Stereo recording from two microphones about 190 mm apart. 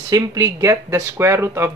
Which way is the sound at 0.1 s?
15° right (ahead or behind).